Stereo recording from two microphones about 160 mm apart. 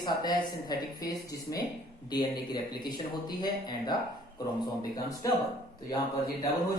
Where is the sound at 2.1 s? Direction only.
25° left (ahead or behind).